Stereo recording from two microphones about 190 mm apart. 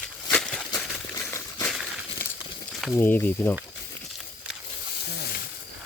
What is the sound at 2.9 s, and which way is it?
Speech, 10° left (ahead or behind).